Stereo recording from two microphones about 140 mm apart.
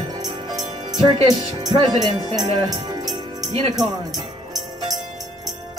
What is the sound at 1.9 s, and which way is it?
Speech, 30° right (ahead or behind).